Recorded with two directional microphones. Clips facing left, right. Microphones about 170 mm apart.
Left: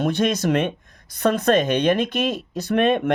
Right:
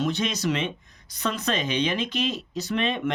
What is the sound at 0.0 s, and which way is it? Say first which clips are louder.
Speech: left 5 dB; 55° left (ahead or behind).